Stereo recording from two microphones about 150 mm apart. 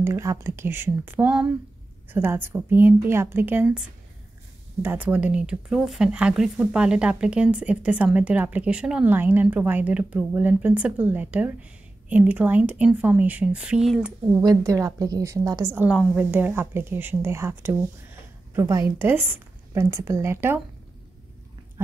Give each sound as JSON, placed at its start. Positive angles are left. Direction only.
{"t": 0.0, "sound": "speech", "side_deg": -20}
{"t": 4.8, "sound": "speech", "side_deg": -10}
{"t": 14.3, "sound": "a woman's voice", "side_deg": -25}